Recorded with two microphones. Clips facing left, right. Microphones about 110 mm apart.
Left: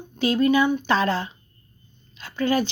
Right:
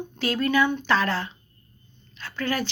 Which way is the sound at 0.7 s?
15° left (ahead or behind).